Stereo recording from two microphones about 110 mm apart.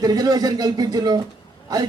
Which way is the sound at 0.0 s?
35° right (ahead or behind).